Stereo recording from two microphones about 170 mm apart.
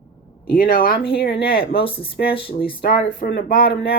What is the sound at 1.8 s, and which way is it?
Speech, 35° left (ahead or behind).